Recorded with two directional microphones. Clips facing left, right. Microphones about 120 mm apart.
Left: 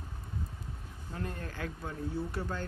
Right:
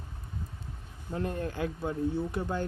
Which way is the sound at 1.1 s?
20° right (ahead or behind).